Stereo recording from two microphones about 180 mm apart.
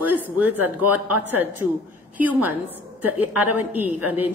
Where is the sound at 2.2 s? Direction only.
10° right (ahead or behind).